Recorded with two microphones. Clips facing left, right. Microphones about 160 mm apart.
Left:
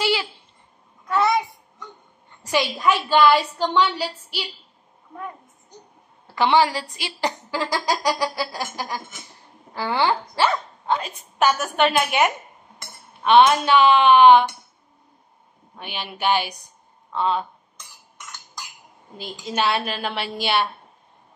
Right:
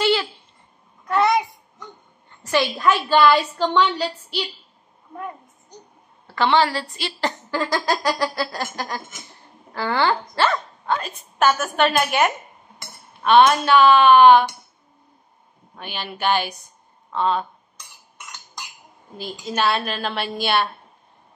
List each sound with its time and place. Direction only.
0.0 s a sound: 10° left (ahead or behind)
1.0 s a sound: centre (ahead or behind)
2.4 s a woman's voice: 15° left (ahead or behind)
6.3 s a woman's voice: 15° left (ahead or behind)
15.8 s a woman's voice: 15° left (ahead or behind)
19.4 s a woman's voice: 15° left (ahead or behind)